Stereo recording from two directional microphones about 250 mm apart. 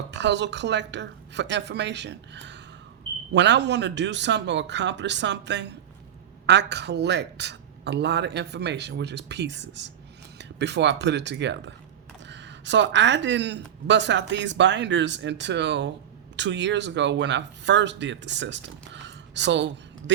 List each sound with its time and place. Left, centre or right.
0.1 s speech: right